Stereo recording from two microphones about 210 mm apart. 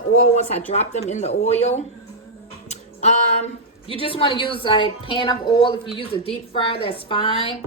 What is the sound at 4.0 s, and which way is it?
A woman's voice, 25° left (ahead or behind).